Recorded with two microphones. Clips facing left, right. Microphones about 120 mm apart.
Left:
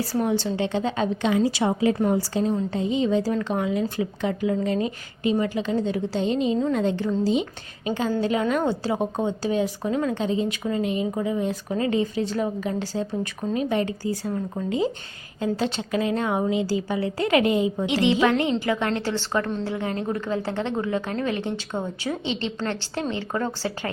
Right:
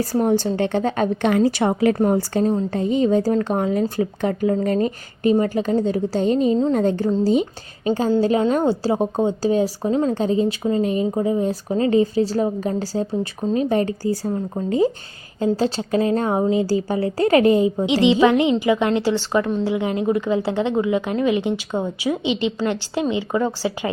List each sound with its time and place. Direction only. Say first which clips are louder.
0.0 s speech: right 5 dB; 45° right (ahead or behind); by 2.0 s 60° right (ahead or behind)
2.0 s a woman's voice: right 4 dB; 50° right (ahead or behind)
17.8 s a woman's voice: right 5 dB; 20° right (ahead or behind)